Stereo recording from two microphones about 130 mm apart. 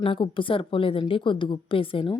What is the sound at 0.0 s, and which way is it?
Speech, 40° left (ahead or behind).